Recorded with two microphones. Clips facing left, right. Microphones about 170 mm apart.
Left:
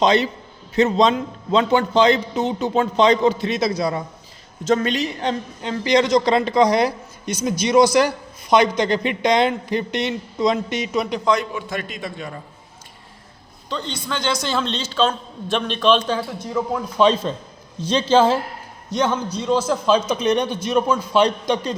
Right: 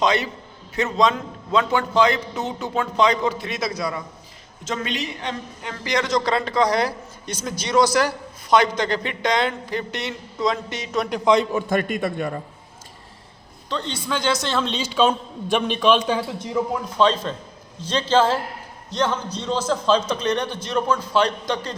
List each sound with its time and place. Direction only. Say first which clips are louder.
0.0 s a man's voice: left 4 dB; 25° left (ahead or behind)
4.6 s a woman's voice: left 8 dB; 40° left (ahead or behind)
5.6 s a man's voice: left 7 dB; 25° left (ahead or behind)
10.9 s a man's voice: even; 5° left (ahead or behind)
11.5 s a man's voice: right 6 dB; 50° right (ahead or behind)
13.7 s a man's voice: right 1 dB; centre (ahead or behind)
14.7 s a man's voice: right 4 dB; 10° right (ahead or behind)
17.0 s a man's voice: left 3 dB; 15° left (ahead or behind)